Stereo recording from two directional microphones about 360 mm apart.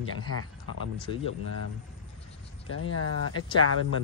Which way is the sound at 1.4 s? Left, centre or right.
Right.